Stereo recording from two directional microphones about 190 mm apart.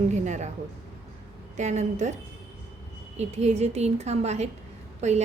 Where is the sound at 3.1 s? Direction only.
35° right (ahead or behind).